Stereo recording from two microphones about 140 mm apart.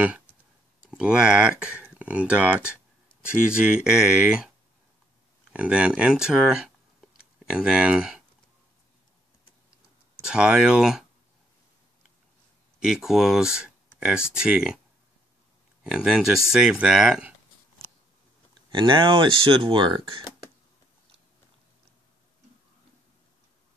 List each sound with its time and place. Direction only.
0.8 s speech: 5° right (ahead or behind)
5.5 s speech: 10° right (ahead or behind)
10.2 s speech: 5° right (ahead or behind)
12.8 s speech: 5° right (ahead or behind)
15.8 s speech: 5° right (ahead or behind)
18.8 s speech: 35° right (ahead or behind)